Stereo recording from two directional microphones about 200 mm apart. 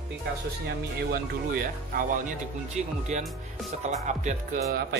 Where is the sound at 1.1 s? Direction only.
45° right (ahead or behind).